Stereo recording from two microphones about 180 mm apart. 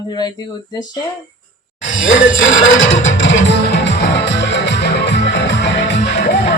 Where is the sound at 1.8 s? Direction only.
90° left.